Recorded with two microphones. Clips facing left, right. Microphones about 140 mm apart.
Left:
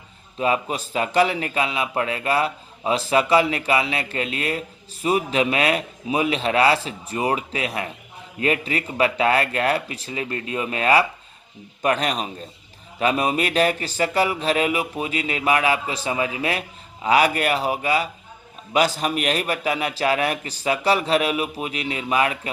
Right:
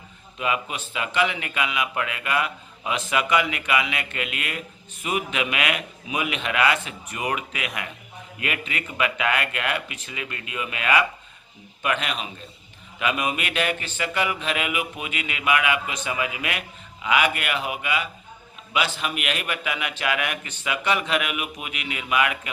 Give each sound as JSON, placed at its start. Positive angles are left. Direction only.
{"t": 0.3, "sound": "speech", "side_deg": 35}